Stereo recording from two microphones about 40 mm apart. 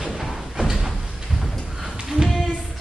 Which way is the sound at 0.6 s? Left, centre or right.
Centre.